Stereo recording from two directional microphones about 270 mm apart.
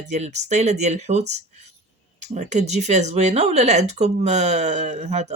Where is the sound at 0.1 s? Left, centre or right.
Right.